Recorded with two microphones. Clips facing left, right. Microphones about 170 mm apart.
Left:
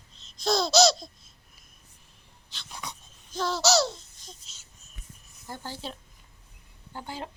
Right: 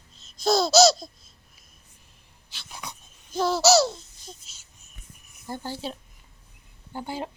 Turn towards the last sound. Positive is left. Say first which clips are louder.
# right 5 dB
turn(degrees=-15)  # may be behind; listen again after turning